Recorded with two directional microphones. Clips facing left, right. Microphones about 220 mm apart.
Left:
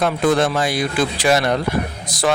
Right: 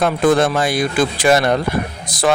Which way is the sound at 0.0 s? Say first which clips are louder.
Right 3 dB; 50° right (ahead or behind).